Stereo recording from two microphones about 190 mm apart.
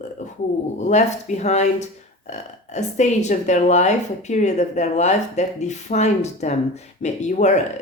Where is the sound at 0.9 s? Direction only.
40° left (ahead or behind).